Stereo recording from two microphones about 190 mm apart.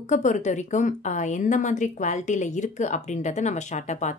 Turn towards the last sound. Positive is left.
turn(degrees=40)  # may be behind; listen again after turning